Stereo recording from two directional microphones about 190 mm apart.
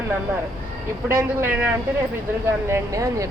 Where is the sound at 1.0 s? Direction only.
10° right (ahead or behind).